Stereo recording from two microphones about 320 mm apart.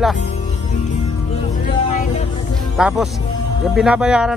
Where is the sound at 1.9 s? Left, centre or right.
Left.